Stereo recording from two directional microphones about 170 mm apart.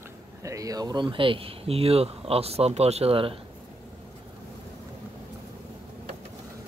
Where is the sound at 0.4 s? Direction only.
20° right (ahead or behind).